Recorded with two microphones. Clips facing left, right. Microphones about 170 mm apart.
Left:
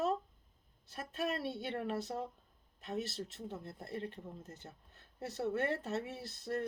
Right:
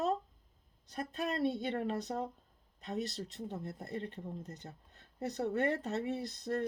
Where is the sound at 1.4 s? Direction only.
15° right (ahead or behind).